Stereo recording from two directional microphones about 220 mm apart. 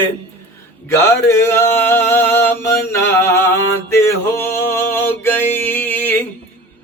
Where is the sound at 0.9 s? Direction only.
10° left (ahead or behind).